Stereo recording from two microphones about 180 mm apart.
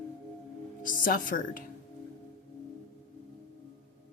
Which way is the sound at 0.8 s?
50° left (ahead or behind).